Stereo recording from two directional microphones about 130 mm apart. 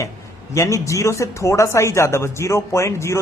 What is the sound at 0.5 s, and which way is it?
Speech, 25° left (ahead or behind).